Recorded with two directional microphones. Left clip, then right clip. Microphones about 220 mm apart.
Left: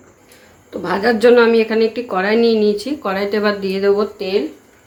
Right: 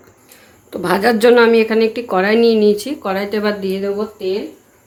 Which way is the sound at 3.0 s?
10° right (ahead or behind).